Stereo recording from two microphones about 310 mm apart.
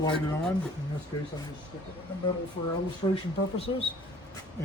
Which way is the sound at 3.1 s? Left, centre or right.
Centre.